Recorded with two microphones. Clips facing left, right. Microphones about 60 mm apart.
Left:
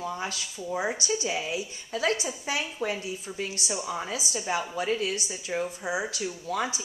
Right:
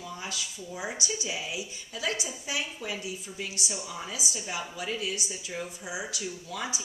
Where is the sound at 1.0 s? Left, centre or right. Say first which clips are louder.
Left 5 dB; left.